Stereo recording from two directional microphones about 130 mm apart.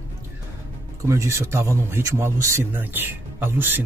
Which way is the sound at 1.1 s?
20° right (ahead or behind).